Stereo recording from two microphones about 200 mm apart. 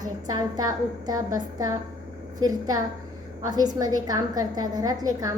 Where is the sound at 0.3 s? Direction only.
20° right (ahead or behind).